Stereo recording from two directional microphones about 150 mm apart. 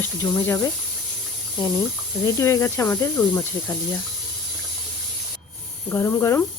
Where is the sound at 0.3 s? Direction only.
10° left (ahead or behind).